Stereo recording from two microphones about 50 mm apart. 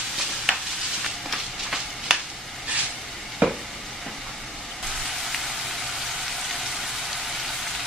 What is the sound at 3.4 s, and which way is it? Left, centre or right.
Sizzle, right.